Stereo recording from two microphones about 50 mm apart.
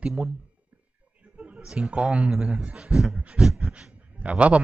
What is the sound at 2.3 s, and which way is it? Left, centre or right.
Speech, centre.